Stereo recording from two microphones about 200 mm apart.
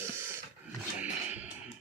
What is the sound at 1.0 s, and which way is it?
Music, 5° right (ahead or behind).